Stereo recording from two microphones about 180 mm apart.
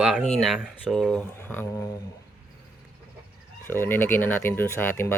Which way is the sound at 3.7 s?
10° left (ahead or behind).